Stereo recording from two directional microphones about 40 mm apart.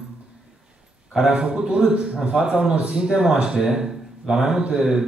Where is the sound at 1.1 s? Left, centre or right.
Centre.